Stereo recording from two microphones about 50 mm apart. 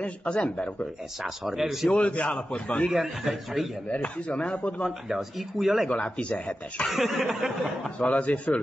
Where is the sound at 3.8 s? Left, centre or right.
Left.